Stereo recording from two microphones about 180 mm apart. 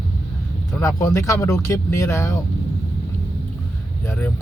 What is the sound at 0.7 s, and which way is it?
Speech, 15° left (ahead or behind).